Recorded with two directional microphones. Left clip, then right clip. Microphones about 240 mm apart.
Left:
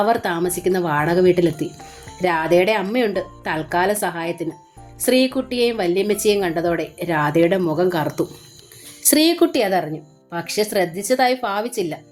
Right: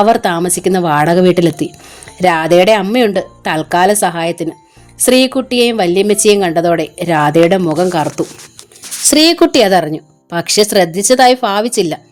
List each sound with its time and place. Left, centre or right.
0.0 s speech: right